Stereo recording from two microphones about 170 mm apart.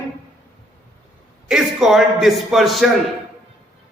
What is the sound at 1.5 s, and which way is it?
A man's voice, centre (ahead or behind).